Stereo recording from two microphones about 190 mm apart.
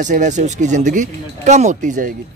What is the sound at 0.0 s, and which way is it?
Speech, 40° right (ahead or behind).